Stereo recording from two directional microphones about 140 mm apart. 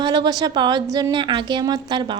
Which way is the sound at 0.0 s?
30° right (ahead or behind).